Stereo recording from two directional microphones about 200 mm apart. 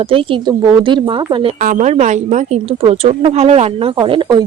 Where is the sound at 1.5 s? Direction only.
40° right (ahead or behind).